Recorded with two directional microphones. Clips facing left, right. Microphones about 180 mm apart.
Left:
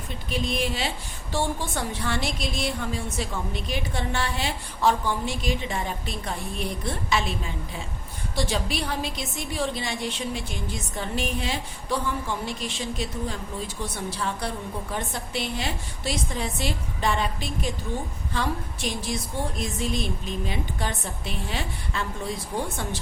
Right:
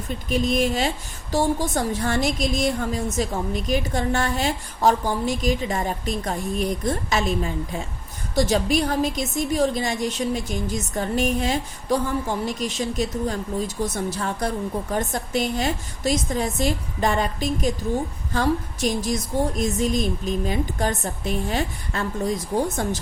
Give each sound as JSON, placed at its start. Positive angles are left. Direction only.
{"t": 0.3, "sound": "a woman's voice", "side_deg": -45}